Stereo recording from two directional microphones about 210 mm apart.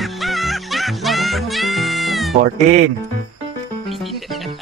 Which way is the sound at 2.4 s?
40° right (ahead or behind).